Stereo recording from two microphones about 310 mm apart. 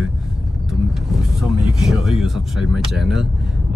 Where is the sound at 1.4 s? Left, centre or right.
Centre.